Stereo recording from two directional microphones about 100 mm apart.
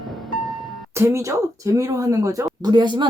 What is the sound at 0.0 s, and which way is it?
Music, centre (ahead or behind).